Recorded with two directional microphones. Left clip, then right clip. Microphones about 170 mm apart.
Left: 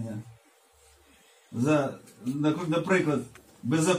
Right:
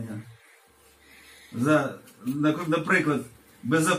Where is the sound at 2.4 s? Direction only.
55° left (ahead or behind).